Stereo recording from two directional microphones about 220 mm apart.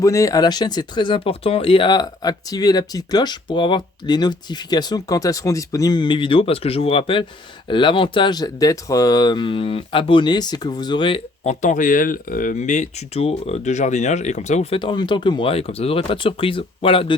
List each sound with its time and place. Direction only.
0.0 s speech: 15° left (ahead or behind)